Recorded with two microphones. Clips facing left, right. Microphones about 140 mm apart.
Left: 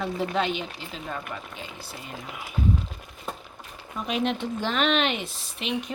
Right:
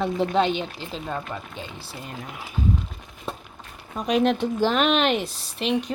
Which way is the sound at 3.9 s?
40° right (ahead or behind).